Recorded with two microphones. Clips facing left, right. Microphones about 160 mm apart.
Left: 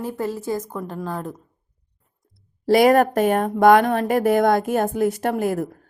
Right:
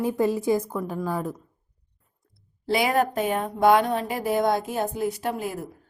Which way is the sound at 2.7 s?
45° left (ahead or behind).